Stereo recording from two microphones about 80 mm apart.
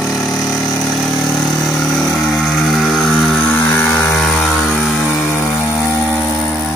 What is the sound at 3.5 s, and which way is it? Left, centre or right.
Vehicle, left.